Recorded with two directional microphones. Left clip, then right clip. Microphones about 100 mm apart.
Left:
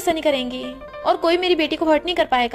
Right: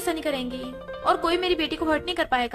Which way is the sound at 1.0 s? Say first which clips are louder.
Left 5 dB; 30° left (ahead or behind).